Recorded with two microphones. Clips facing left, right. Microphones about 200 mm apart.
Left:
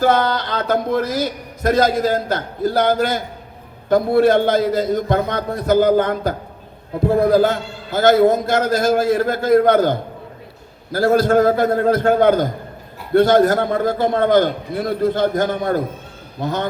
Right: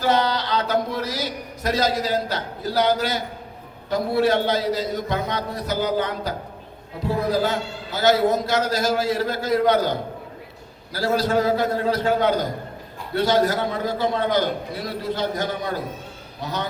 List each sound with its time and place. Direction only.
0.0 s a man's voice: 50° left (ahead or behind)